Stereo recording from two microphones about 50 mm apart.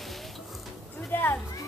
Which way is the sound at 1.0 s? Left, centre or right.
Left.